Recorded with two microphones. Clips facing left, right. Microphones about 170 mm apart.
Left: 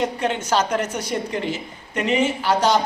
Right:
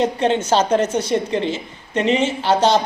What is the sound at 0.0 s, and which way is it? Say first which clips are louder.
A woman's voice: right 5 dB; 25° right (ahead or behind).